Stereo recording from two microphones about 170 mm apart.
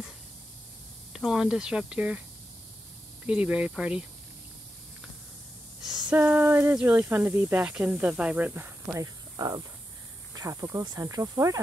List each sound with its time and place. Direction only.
1.1 s speech: 5° right (ahead or behind)
3.3 s speech: 5° right (ahead or behind)
6.0 s speech: 10° right (ahead or behind)